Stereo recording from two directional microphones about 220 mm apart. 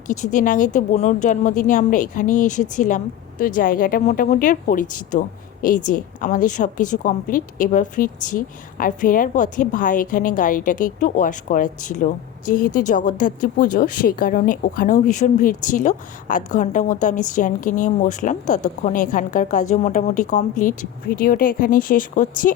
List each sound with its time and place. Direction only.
0.1 s a woman's voice: 35° left (ahead or behind)